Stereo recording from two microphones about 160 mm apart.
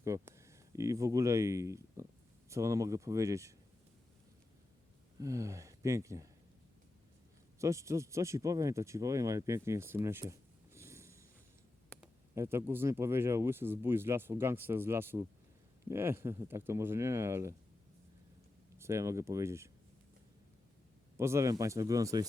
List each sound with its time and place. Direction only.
0.0 s speech: 15° right (ahead or behind)
5.2 s speech: 20° right (ahead or behind)
7.6 s speech: 20° right (ahead or behind)
12.3 s speech: 15° right (ahead or behind)
18.8 s speech: 20° right (ahead or behind)
21.2 s speech: 15° right (ahead or behind)